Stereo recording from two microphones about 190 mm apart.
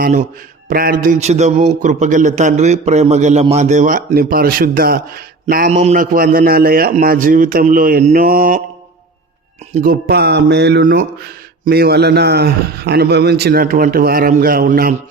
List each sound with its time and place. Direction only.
0.0 s a man's voice: 40° right (ahead or behind)
9.8 s speech: 50° right (ahead or behind)